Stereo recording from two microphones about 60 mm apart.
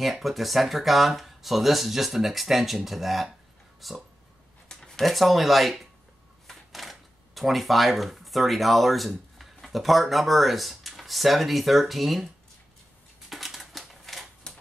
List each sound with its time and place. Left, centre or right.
0.0 s speech: centre
4.6 s a sound: centre
5.1 s speech: centre
13.3 s typewriter: centre
14.5 s typewriter: centre